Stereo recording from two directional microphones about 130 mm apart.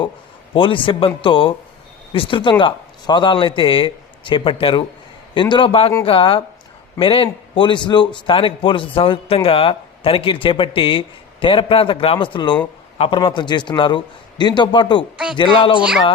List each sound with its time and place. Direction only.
0.5 s a man's voice: 40° left (ahead or behind)